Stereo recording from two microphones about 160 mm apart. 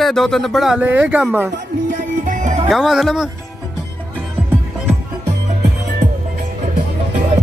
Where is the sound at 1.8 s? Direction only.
55° right (ahead or behind).